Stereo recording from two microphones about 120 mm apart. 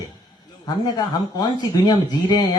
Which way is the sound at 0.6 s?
35° left (ahead or behind).